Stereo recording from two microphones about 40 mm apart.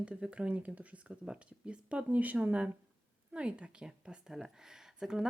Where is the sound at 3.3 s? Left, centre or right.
Right.